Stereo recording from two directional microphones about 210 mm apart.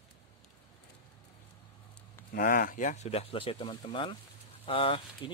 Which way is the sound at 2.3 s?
45° left (ahead or behind).